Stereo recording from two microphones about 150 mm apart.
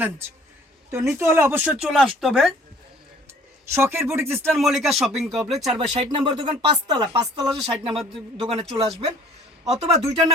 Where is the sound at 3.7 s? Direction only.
15° right (ahead or behind).